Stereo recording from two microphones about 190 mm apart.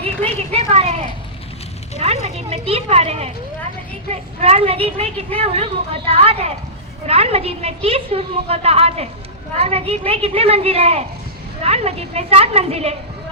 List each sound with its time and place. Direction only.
0.0 s speech: 35° right (ahead or behind)
2.0 s a woman's voice: 35° right (ahead or behind)